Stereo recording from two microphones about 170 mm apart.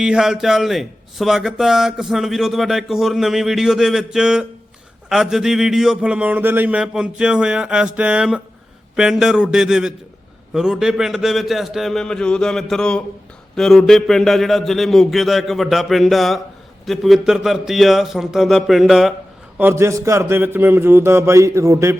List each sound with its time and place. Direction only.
0.0 s a man's voice: 5° right (ahead or behind)
19.5 s a man's voice: 15° right (ahead or behind)